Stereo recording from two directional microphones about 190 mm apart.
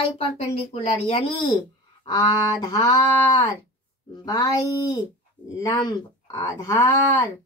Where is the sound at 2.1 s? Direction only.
20° left (ahead or behind).